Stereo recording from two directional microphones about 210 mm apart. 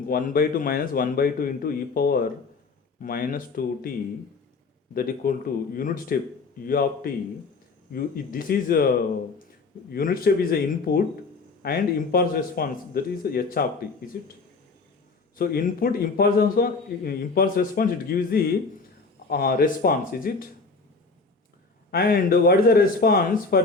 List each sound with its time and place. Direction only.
0.1 s a man's voice: 40° left (ahead or behind)
4.9 s a man's voice: 45° left (ahead or behind)
9.9 s a man's voice: 45° left (ahead or behind)
15.4 s a man's voice: 45° left (ahead or behind)
21.9 s a man's voice: 45° left (ahead or behind)